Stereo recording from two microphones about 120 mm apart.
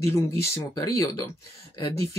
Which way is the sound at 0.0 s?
20° left (ahead or behind).